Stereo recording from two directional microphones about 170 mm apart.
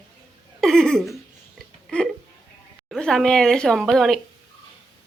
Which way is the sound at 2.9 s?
5° left (ahead or behind).